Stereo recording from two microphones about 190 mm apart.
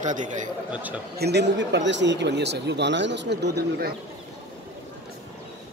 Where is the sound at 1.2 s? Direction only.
60° right (ahead or behind).